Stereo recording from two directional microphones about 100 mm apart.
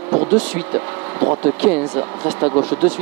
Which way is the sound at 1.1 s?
25° right (ahead or behind).